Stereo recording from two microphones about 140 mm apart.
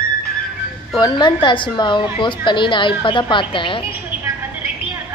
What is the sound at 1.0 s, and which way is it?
A woman's voice, 30° left (ahead or behind).